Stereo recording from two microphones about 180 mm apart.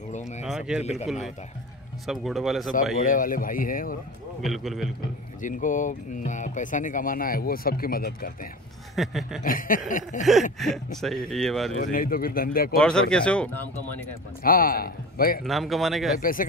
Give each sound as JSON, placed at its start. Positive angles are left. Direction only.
{"t": 0.5, "sound": "speech", "side_deg": -5}
{"t": 2.0, "sound": "speech", "side_deg": 0}
{"t": 3.0, "sound": "speech", "side_deg": 50}
{"t": 4.4, "sound": "speech", "side_deg": 0}
{"t": 5.4, "sound": "speech", "side_deg": 45}
{"t": 8.9, "sound": "speech", "side_deg": 0}
{"t": 9.4, "sound": "speech", "side_deg": 50}
{"t": 10.6, "sound": "speech", "side_deg": 0}
{"t": 11.8, "sound": "speech", "side_deg": 50}
{"t": 12.7, "sound": "speech", "side_deg": 5}
{"t": 14.4, "sound": "speech", "side_deg": 55}
{"t": 15.4, "sound": "speech", "side_deg": 0}
{"t": 16.2, "sound": "speech", "side_deg": 50}